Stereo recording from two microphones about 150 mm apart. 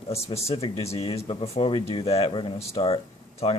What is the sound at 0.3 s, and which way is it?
Speech, 40° left (ahead or behind).